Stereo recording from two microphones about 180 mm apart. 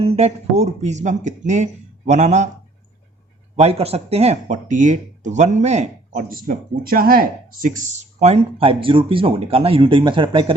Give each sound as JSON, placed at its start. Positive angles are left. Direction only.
{"t": 0.0, "sound": "speech", "side_deg": -35}
{"t": 3.5, "sound": "speech", "side_deg": -35}